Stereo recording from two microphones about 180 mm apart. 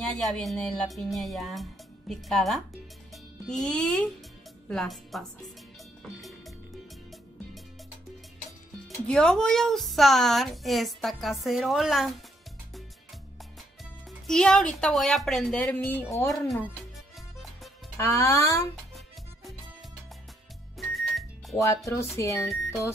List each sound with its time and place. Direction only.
0.1 s a woman's voice: centre (ahead or behind)
8.5 s speech: centre (ahead or behind)
14.2 s speech: 5° left (ahead or behind)
17.9 s speech: 15° left (ahead or behind)
20.7 s music: centre (ahead or behind)
21.5 s speech: 15° left (ahead or behind)